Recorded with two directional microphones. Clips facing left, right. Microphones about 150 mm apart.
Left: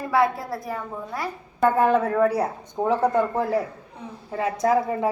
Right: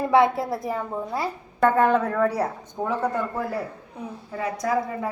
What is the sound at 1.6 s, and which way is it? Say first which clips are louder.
Speech: even; 10° left (ahead or behind).